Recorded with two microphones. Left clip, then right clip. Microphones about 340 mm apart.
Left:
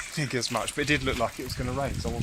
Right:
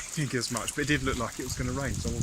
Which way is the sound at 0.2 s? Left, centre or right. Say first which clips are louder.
Left 3 dB; centre.